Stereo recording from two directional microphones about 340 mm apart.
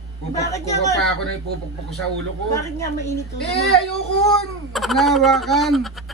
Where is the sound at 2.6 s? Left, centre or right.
Centre.